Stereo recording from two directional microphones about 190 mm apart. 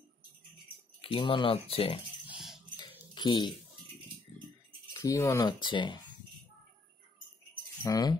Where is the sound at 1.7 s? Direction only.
30° left (ahead or behind).